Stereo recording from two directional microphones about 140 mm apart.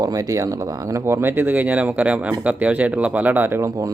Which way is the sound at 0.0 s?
25° right (ahead or behind).